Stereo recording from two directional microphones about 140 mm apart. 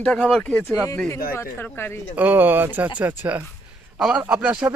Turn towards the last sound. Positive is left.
turn(degrees=-10)  # may be behind; listen again after turning